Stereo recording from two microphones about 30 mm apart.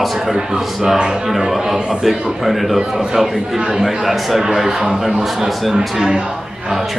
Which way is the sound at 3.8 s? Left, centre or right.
Centre.